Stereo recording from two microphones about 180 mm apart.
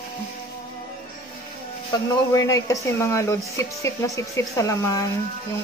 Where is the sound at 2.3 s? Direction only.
20° left (ahead or behind).